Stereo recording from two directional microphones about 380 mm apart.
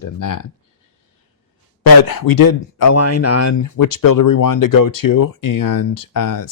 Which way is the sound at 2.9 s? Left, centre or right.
Left.